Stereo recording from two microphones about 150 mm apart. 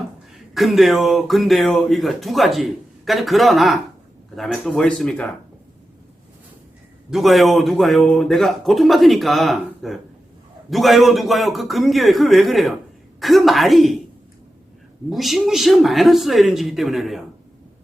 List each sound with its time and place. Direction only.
0.5 s speech: centre (ahead or behind)
7.1 s speech: centre (ahead or behind)
15.1 s speech: centre (ahead or behind)